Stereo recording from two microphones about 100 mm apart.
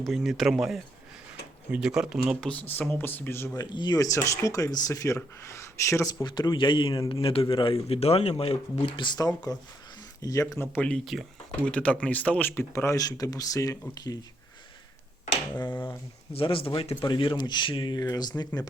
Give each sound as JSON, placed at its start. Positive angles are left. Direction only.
{"t": 0.0, "sound": "speech", "side_deg": 0}
{"t": 2.4, "sound": "speech", "side_deg": 15}
{"t": 3.5, "sound": "speech", "side_deg": 45}
{"t": 4.0, "sound": "speech", "side_deg": 30}
{"t": 6.2, "sound": "a man's voice", "side_deg": 50}
{"t": 7.9, "sound": "speech", "side_deg": 90}
{"t": 9.1, "sound": "speech", "side_deg": 40}
{"t": 10.8, "sound": "speech", "side_deg": 10}
{"t": 11.6, "sound": "speech", "side_deg": 10}
{"t": 15.5, "sound": "speech", "side_deg": 20}
{"t": 16.3, "sound": "a man's voice", "side_deg": 65}